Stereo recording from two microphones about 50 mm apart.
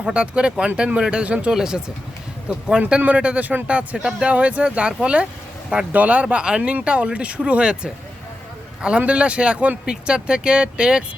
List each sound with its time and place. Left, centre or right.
0.0 s speech: right
1.5 s speech: centre
3.2 s speech: right
6.2 s speech: centre
6.6 s speech: right